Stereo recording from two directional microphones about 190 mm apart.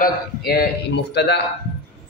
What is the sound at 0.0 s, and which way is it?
A man's voice, 55° left (ahead or behind).